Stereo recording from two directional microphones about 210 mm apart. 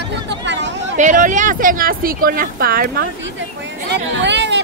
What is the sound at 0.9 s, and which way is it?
Speech, 35° right (ahead or behind).